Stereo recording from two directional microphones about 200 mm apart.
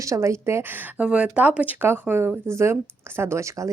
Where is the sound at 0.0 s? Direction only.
15° right (ahead or behind).